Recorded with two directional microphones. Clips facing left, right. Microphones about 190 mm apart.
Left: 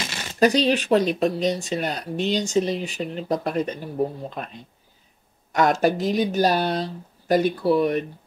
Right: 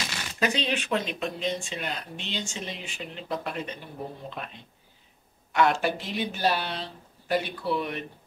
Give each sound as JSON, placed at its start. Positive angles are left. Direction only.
{"t": 0.4, "sound": "speech", "side_deg": 40}